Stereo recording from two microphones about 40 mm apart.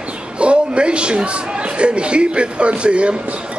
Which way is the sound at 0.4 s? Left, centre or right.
Right.